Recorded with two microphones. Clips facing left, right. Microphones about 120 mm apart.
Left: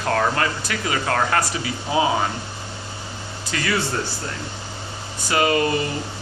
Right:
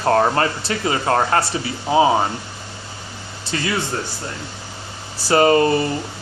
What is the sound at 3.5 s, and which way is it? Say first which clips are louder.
Speech: right 3 dB; 30° right (ahead or behind).